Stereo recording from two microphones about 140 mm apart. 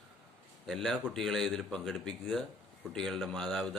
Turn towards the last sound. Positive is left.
turn(degrees=0)  # may be behind; listen again after turning